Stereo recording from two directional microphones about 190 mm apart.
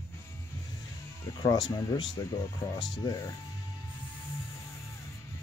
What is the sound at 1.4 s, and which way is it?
Speech, 25° left (ahead or behind).